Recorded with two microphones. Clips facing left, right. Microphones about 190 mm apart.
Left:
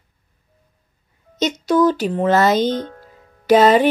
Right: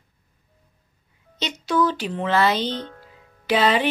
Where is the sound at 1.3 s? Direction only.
45° left (ahead or behind).